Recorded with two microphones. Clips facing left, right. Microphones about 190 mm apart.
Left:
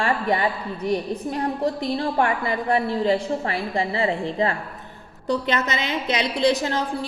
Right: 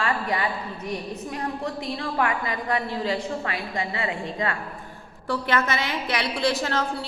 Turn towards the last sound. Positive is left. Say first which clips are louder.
# left 2 dB
turn(degrees=15)  # may be behind; listen again after turning